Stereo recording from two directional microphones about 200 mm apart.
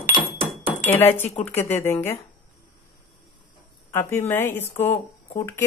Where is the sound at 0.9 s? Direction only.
10° left (ahead or behind).